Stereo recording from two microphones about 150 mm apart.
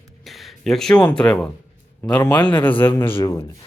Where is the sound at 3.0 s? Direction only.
35° left (ahead or behind).